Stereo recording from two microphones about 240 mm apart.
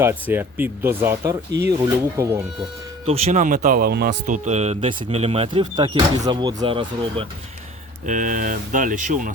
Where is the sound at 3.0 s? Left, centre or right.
Right.